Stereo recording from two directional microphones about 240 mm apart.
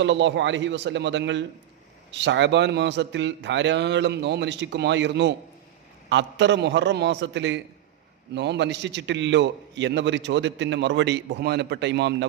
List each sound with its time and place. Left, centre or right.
0.0 s a man's voice: right